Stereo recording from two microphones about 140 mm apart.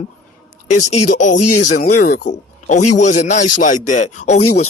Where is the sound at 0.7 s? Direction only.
55° left (ahead or behind).